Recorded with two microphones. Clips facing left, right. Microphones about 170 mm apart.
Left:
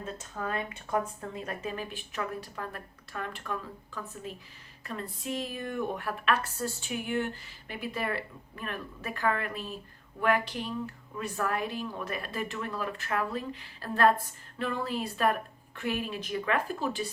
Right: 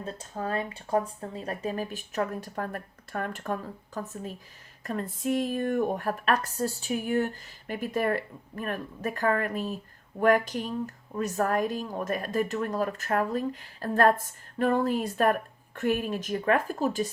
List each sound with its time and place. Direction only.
0.0 s speech: 35° right (ahead or behind)